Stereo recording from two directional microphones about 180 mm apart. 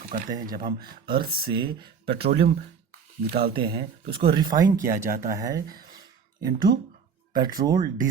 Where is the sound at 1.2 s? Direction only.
55° right (ahead or behind).